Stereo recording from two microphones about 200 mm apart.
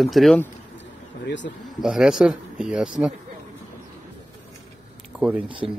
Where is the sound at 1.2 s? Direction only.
65° left (ahead or behind).